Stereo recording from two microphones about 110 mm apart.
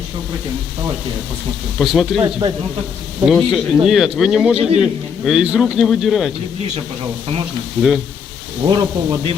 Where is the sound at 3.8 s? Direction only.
5° right (ahead or behind).